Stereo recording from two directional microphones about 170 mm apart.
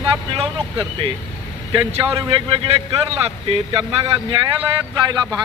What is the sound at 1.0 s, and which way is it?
A man's voice, 30° right (ahead or behind).